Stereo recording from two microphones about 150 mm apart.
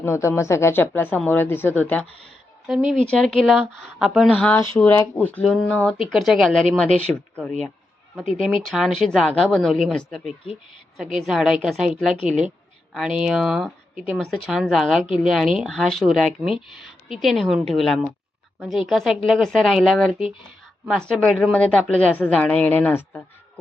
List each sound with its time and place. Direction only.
0.0 s a woman's voice: 20° left (ahead or behind)
2.6 s a woman's voice: 5° right (ahead or behind)
8.6 s a woman's voice: centre (ahead or behind)